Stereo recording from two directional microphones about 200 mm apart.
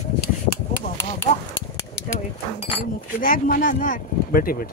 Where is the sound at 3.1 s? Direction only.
45° left (ahead or behind).